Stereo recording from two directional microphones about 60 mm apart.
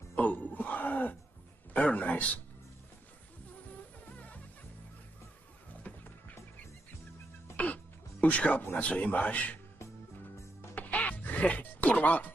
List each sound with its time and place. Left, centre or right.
0.1 s throat clearing: left
1.7 s speech: left
5.7 s music: left
7.5 s music: left
8.7 s speech: left
10.7 s music: left